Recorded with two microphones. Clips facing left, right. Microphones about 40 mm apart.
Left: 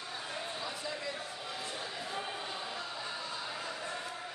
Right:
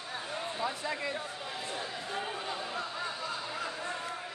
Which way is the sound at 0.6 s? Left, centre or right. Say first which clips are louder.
Right 5 dB; right.